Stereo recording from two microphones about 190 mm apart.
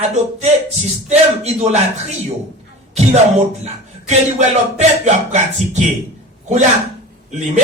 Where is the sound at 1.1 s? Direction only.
35° right (ahead or behind).